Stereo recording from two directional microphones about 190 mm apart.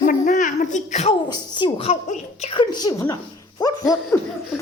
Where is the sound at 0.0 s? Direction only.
45° left (ahead or behind).